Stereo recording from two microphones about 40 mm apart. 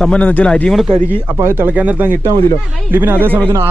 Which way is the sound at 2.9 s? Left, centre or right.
Right.